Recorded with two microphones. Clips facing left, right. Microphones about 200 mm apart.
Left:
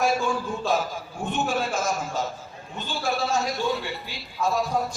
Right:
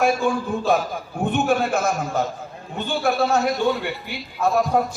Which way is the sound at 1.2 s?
60° right (ahead or behind).